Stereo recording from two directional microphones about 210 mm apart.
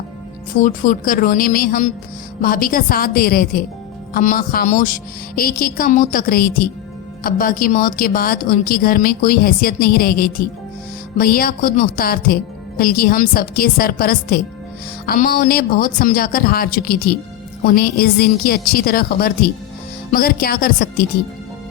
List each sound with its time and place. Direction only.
0.5 s a woman's voice: 40° left (ahead or behind)